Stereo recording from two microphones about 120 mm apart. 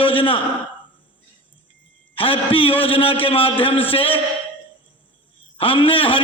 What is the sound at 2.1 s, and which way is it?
A man's voice, 50° left (ahead or behind).